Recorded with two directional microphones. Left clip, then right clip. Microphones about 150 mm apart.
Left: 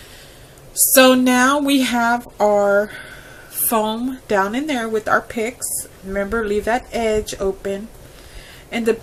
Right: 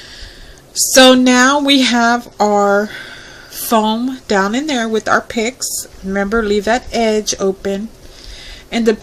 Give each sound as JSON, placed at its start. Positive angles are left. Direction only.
{"t": 0.9, "sound": "speech", "side_deg": -45}